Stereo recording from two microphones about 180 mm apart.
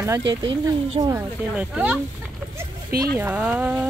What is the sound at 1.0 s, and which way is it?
Speech, 25° right (ahead or behind).